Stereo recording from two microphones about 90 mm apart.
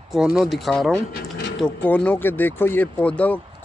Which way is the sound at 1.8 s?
15° left (ahead or behind).